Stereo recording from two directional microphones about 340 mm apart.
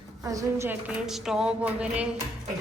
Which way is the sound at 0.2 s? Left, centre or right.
Centre.